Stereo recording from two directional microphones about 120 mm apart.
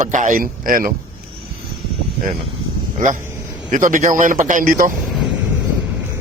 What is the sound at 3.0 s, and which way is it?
A man's voice, 90° right.